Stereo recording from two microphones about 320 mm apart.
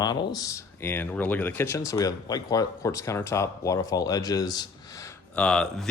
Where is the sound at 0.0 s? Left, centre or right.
Centre.